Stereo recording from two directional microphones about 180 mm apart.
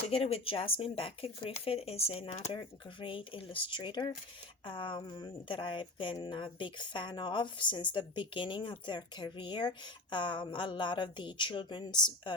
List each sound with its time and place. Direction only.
0.1 s speech: 35° left (ahead or behind)